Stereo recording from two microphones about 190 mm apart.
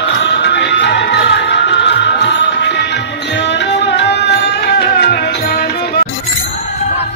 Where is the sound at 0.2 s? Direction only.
65° left (ahead or behind).